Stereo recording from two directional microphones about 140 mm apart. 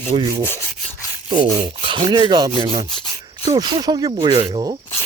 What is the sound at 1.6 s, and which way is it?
Speech, 35° right (ahead or behind).